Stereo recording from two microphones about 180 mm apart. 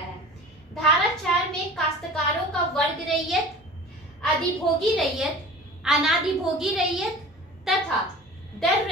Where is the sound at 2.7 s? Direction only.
Centre (ahead or behind).